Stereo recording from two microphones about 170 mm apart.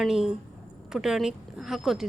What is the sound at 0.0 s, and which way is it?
Speech, 5° right (ahead or behind).